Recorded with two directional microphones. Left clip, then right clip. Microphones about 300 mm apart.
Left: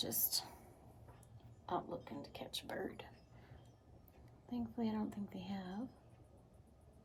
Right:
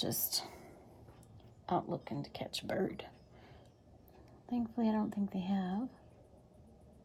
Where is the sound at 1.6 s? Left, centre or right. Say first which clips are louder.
Right 6 dB; right.